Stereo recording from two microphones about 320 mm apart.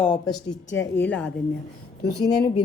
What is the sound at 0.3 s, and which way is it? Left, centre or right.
Speech, centre.